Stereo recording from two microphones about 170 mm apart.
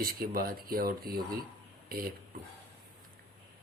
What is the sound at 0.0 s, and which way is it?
A man's voice, 60° right (ahead or behind).